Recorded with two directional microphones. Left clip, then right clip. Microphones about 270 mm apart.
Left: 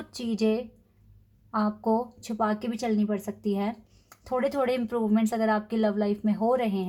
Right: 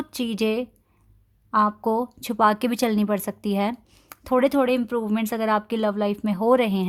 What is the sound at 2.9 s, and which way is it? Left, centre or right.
Speech, right.